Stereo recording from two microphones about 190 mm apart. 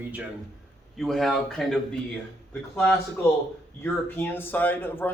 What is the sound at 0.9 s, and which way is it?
Speech, centre (ahead or behind).